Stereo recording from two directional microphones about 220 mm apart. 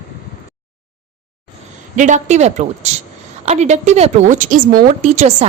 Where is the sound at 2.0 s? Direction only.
35° right (ahead or behind).